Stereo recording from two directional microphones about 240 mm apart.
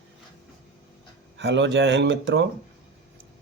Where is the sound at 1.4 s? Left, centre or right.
Right.